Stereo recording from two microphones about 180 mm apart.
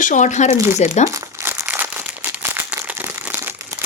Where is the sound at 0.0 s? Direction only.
45° left (ahead or behind).